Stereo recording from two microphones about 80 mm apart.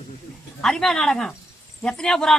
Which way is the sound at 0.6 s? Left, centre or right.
Centre.